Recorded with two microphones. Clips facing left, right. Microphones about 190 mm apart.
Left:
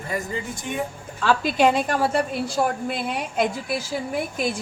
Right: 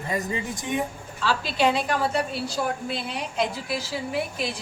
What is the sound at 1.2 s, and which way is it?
A woman's voice, 50° left (ahead or behind).